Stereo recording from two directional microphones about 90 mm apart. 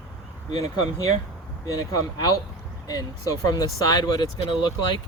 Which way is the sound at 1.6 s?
45° left (ahead or behind).